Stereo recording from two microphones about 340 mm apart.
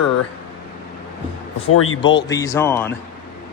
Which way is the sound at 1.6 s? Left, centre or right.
Left.